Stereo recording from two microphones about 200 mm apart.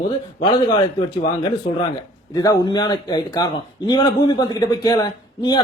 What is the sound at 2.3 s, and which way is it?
A man's voice, 20° left (ahead or behind).